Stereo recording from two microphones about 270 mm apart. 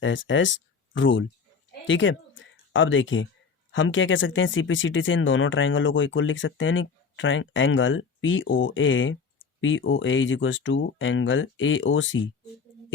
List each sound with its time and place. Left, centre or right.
0.0 s speech: left